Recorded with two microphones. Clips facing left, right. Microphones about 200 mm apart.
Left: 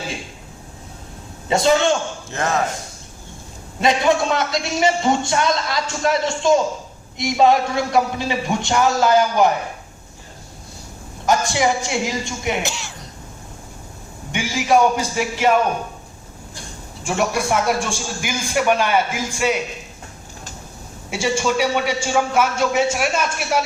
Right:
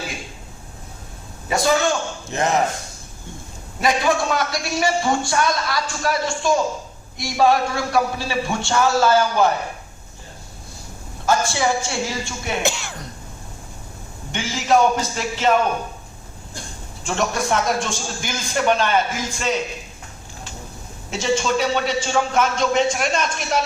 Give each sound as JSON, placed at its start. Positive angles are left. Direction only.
{"t": 1.5, "sound": "a man's voice", "side_deg": 25}
{"t": 2.3, "sound": "a man's voice", "side_deg": -20}
{"t": 3.8, "sound": "a man's voice", "side_deg": 25}
{"t": 11.3, "sound": "a man's voice", "side_deg": 15}
{"t": 12.6, "sound": "speech", "side_deg": -55}
{"t": 14.3, "sound": "a man's voice", "side_deg": 10}
{"t": 17.0, "sound": "a man's voice", "side_deg": 10}
{"t": 21.1, "sound": "a man's voice", "side_deg": 10}